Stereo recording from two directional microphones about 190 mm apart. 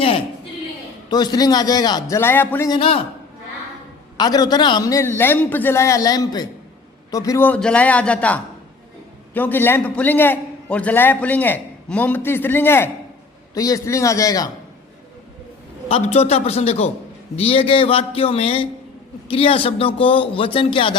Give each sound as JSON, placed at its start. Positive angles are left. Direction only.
{"t": 1.1, "sound": "a man's voice", "side_deg": 20}
{"t": 2.7, "sound": "a man's voice", "side_deg": 30}
{"t": 4.2, "sound": "a man's voice", "side_deg": 20}
{"t": 15.9, "sound": "a man's voice", "side_deg": 30}